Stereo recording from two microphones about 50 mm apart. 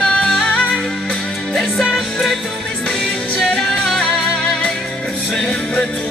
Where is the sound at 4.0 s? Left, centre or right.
Centre.